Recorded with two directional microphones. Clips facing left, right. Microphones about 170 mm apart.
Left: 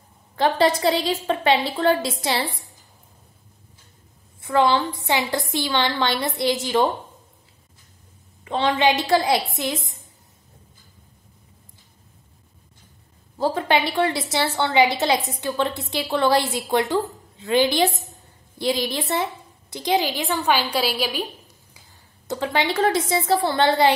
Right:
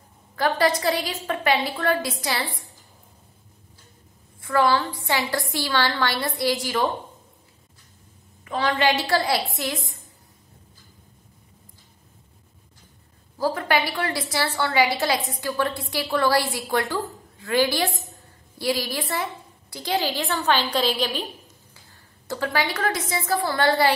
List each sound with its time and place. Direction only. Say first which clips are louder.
0.4 s a woman's voice: left 3 dB; 25° left (ahead or behind)
4.4 s a woman's voice: left 2 dB; 20° left (ahead or behind)
8.5 s a woman's voice: left 2 dB; 25° left (ahead or behind)
13.4 s a woman's voice: left 2 dB; 25° left (ahead or behind)
22.3 s a woman's voice: left 2 dB; 20° left (ahead or behind)